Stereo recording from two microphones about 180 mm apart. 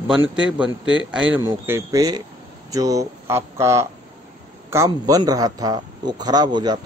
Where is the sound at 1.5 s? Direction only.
15° right (ahead or behind).